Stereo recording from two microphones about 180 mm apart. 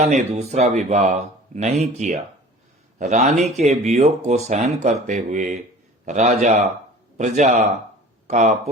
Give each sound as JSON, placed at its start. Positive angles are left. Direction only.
{"t": 0.0, "sound": "speech", "side_deg": -40}